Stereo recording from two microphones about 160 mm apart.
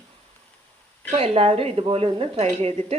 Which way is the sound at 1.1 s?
35° right (ahead or behind).